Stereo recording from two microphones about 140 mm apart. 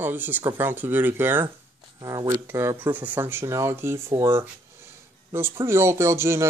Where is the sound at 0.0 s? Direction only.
15° right (ahead or behind).